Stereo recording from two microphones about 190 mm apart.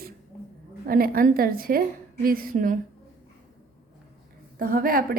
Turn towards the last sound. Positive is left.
turn(degrees=-50)  # may be behind; listen again after turning